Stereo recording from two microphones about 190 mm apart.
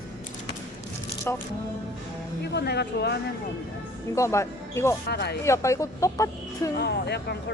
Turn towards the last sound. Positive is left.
turn(degrees=60)  # may be behind; listen again after turning